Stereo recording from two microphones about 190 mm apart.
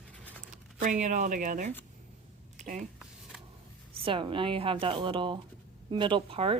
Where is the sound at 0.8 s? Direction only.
40° right (ahead or behind).